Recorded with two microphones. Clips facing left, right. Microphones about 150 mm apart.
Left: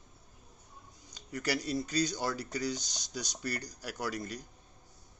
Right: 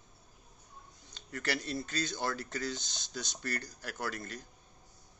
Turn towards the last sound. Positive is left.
turn(degrees=15)  # may be behind; listen again after turning